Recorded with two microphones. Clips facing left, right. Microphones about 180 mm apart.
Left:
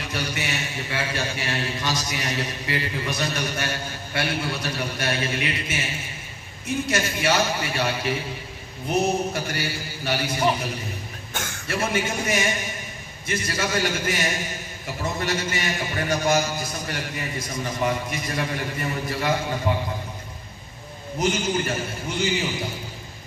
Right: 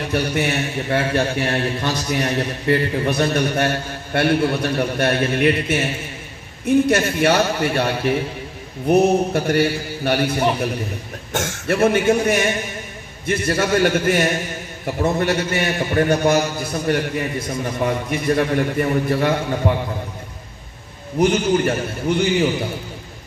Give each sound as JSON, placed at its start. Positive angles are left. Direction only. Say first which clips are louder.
{"t": 0.0, "sound": "a man's voice", "louder": "right 9 dB", "side_deg": -55}
{"t": 11.4, "sound": "a man's voice", "louder": "right 10 dB", "side_deg": -70}
{"t": 21.2, "sound": "a man's voice", "louder": "right 7 dB", "side_deg": -60}